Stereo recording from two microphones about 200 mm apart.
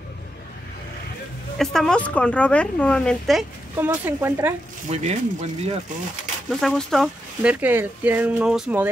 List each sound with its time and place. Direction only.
1.6 s a woman's voice: centre (ahead or behind)
4.8 s speech: 35° right (ahead or behind)
6.6 s a woman's voice: centre (ahead or behind)